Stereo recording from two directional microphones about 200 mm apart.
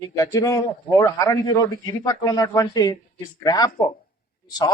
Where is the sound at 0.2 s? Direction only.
15° left (ahead or behind).